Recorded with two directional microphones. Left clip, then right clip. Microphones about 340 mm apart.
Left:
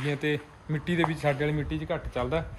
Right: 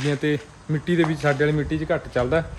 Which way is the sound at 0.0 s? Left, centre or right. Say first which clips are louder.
Right 5 dB; centre.